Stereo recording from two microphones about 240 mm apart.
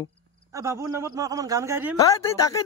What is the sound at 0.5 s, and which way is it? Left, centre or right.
Speech, centre.